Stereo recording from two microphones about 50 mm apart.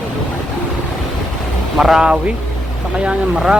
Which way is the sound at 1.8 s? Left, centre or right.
Centre.